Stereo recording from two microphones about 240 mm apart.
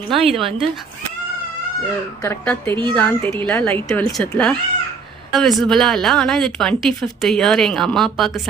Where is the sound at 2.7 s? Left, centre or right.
Centre.